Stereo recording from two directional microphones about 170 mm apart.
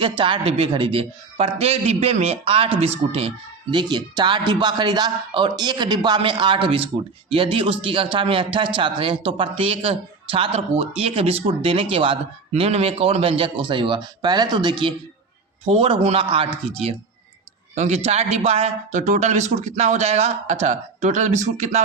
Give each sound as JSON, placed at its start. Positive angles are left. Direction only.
{"t": 0.2, "sound": "a man's voice", "side_deg": -35}